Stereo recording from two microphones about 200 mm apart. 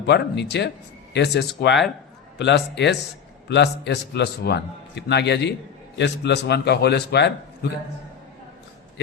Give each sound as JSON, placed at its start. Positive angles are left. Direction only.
{"t": 0.0, "sound": "a man's voice", "side_deg": 55}